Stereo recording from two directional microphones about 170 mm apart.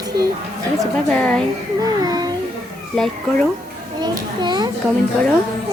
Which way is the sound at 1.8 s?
25° right (ahead or behind).